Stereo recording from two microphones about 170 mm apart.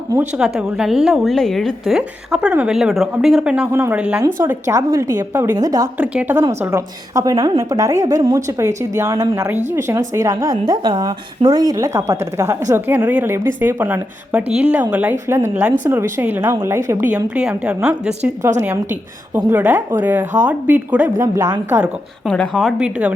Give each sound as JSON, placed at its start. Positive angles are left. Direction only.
{"t": 0.3, "sound": "a woman's voice", "side_deg": -5}
{"t": 6.0, "sound": "a woman's voice", "side_deg": -10}
{"t": 22.3, "sound": "a woman's voice", "side_deg": 5}